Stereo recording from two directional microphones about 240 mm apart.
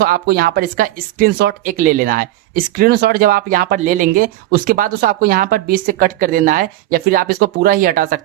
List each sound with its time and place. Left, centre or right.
0.0 s speech: right